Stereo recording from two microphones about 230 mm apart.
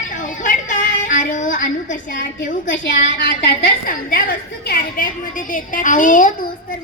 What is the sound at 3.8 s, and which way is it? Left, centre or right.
A woman's voice, left.